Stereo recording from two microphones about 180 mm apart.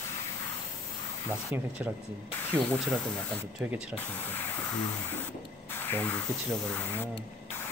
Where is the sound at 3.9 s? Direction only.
10° left (ahead or behind).